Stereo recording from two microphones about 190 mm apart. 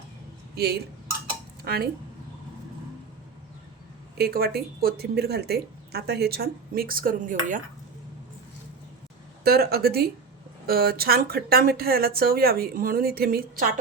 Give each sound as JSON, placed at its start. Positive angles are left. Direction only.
{"t": 0.5, "sound": "speech", "side_deg": -55}
{"t": 4.2, "sound": "speech", "side_deg": -55}
{"t": 9.4, "sound": "speech", "side_deg": -55}